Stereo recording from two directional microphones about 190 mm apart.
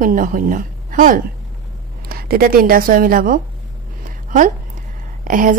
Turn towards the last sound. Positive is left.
turn(degrees=-45)  # may be behind; listen again after turning